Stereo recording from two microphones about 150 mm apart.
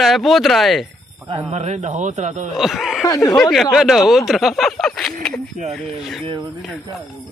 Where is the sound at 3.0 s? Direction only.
25° left (ahead or behind).